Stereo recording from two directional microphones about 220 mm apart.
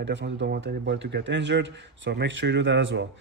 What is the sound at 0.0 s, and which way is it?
Speech, 55° right (ahead or behind).